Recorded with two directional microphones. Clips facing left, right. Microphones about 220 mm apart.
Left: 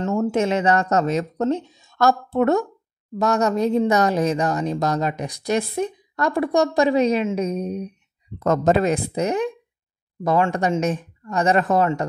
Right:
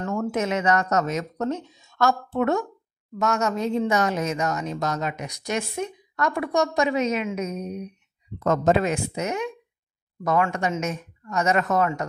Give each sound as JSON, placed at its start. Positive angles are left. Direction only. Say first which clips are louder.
{"t": 0.0, "sound": "a woman's voice", "louder": "left 5 dB", "side_deg": 20}